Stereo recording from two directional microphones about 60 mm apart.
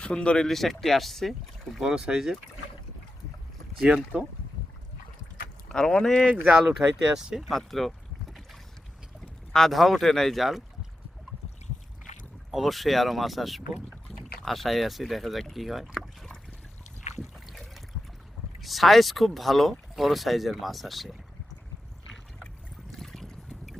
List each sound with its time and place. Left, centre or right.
0.0 s speech: centre
0.4 s speech: centre
1.8 s speech: centre
3.8 s speech: centre
5.7 s speech: centre
6.2 s speech: right
6.5 s speech: centre
7.5 s boat: centre
9.5 s speech: centre
12.5 s speech: centre
17.2 s trickle: centre
18.6 s speech: centre
22.9 s boat: centre